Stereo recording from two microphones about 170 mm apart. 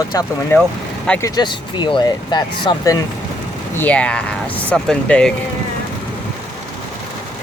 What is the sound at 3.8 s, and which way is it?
Speech, 10° left (ahead or behind).